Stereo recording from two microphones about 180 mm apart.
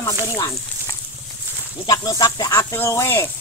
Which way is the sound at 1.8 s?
20° left (ahead or behind).